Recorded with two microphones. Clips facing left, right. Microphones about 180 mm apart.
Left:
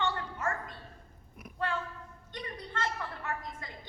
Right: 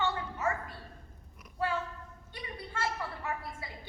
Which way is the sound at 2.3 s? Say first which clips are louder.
Left 2 dB; 5° right (ahead or behind).